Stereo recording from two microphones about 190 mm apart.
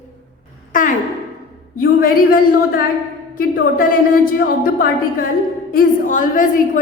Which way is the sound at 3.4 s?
50° left (ahead or behind).